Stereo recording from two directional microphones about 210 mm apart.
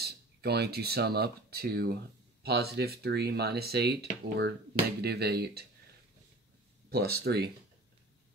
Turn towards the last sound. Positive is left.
turn(degrees=-50)  # may be behind; listen again after turning